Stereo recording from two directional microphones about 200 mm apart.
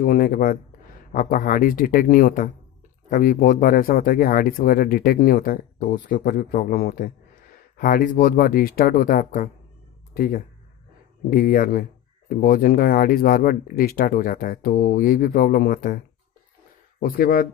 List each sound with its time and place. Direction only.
0.0 s speech: 45° left (ahead or behind)
17.0 s speech: 45° left (ahead or behind)